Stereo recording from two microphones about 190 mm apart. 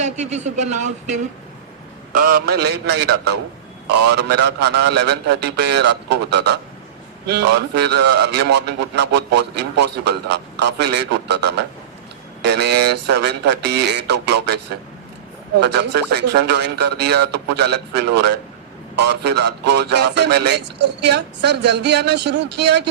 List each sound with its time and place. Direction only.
0.0 s speech: 35° right (ahead or behind)
2.1 s a man's voice: 50° right (ahead or behind)
15.6 s a man's voice: 65° right (ahead or behind)